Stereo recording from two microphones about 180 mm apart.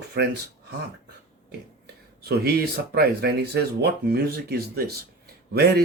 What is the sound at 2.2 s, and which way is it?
Speech, 60° right (ahead or behind).